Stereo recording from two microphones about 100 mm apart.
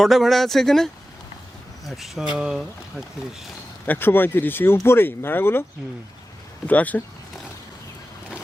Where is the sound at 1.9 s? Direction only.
5° right (ahead or behind).